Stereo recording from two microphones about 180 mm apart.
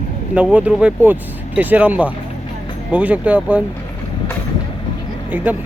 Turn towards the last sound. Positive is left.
turn(degrees=-10)  # may be behind; listen again after turning